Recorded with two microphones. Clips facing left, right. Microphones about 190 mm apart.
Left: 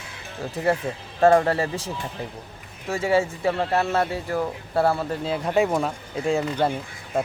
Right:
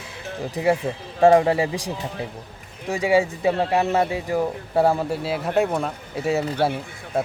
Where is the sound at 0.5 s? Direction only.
10° right (ahead or behind).